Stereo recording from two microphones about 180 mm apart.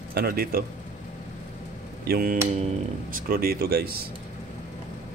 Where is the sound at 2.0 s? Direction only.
55° right (ahead or behind).